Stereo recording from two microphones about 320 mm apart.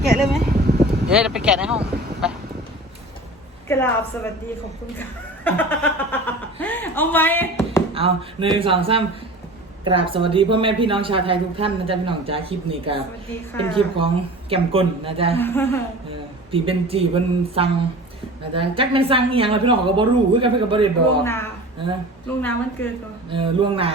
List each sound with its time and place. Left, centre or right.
0.0 s a sound: centre
0.4 s a sound: right
1.1 s speech: centre
3.7 s a woman's voice: centre
5.5 s speech: centre
7.9 s a woman's voice: centre
14.5 s a woman's voice: centre
15.4 s a woman's voice: centre
16.5 s a woman's voice: centre
21.2 s a woman's voice: centre
23.3 s a woman's voice: centre